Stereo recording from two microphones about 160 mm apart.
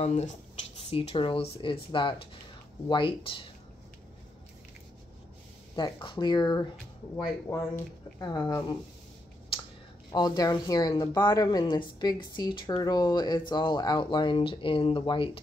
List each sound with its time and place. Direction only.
0.0 s speech: 45° left (ahead or behind)
5.8 s speech: 30° left (ahead or behind)
7.4 s speech: 15° left (ahead or behind)
10.1 s speech: 25° left (ahead or behind)